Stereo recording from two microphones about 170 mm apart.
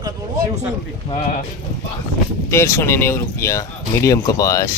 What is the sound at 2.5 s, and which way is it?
Speech, 15° left (ahead or behind).